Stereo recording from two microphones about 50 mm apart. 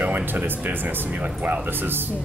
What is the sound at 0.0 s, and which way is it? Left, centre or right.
Speech, right.